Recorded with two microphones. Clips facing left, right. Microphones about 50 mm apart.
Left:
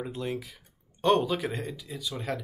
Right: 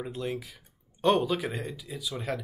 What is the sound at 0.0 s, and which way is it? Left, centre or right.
Speech, centre.